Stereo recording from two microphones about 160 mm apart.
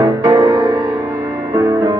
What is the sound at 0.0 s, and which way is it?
Music, 25° right (ahead or behind).